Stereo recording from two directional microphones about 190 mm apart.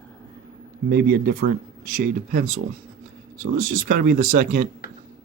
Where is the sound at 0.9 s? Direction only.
55° right (ahead or behind).